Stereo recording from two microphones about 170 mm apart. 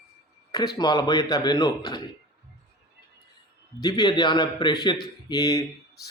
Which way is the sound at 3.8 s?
25° left (ahead or behind).